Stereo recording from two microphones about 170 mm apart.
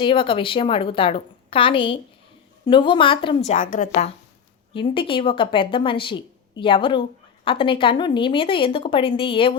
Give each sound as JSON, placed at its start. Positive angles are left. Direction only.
{"t": 0.0, "sound": "a woman's voice", "side_deg": 30}
{"t": 4.7, "sound": "a woman's voice", "side_deg": 30}